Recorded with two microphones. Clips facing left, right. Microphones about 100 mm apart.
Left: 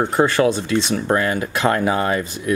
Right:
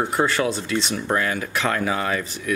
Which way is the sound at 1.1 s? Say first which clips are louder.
Left 3 dB; 30° left (ahead or behind).